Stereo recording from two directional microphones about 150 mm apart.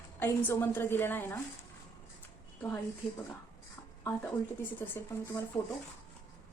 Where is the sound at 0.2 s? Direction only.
15° left (ahead or behind).